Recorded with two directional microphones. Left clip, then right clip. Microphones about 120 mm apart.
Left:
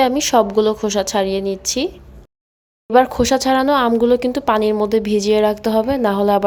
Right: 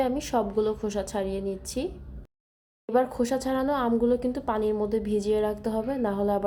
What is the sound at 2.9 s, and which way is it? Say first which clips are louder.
A woman's voice: left 11 dB; 20° left (ahead or behind).